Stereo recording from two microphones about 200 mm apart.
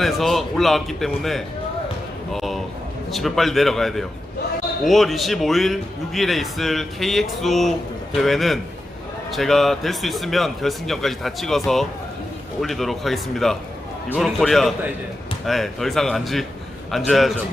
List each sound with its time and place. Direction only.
0.0 s speech: centre (ahead or behind)
2.3 s a sound: centre (ahead or behind)
3.1 s speech: centre (ahead or behind)